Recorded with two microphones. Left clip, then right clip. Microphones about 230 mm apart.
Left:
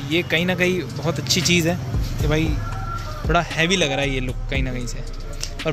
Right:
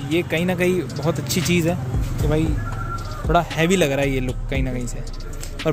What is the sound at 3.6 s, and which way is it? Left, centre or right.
Speech, right.